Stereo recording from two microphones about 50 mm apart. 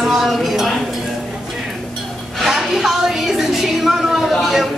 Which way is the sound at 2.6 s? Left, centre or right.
Centre.